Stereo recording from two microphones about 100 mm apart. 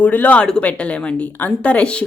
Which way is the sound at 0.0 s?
15° left (ahead or behind).